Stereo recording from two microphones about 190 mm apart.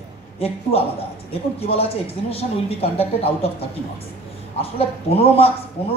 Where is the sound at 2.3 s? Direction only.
30° left (ahead or behind).